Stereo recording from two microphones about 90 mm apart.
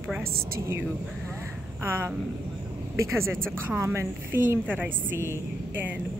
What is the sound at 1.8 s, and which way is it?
A woman's voice, 30° right (ahead or behind).